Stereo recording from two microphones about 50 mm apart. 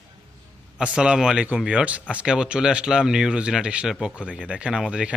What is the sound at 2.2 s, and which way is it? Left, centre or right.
Speech, centre.